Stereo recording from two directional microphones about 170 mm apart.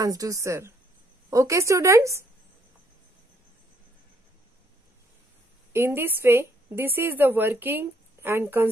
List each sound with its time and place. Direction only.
0.0 s a woman's voice: 20° right (ahead or behind)
5.7 s a woman's voice: 15° right (ahead or behind)